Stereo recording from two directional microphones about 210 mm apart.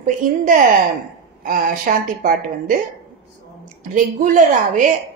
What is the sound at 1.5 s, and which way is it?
A woman's voice, 40° right (ahead or behind).